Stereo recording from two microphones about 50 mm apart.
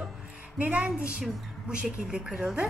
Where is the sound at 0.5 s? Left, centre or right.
Right.